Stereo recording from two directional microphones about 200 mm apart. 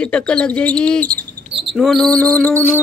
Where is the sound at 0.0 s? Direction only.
5° left (ahead or behind).